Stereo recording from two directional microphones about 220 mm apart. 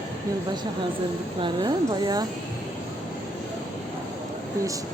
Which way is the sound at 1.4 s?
20° right (ahead or behind).